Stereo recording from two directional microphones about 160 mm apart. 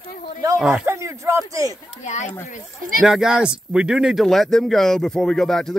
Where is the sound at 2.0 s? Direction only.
45° left (ahead or behind).